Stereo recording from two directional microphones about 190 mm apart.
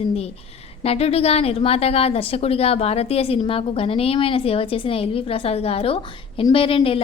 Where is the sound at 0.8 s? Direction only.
30° left (ahead or behind).